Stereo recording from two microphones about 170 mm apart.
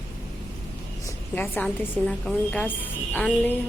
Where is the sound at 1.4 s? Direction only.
10° left (ahead or behind).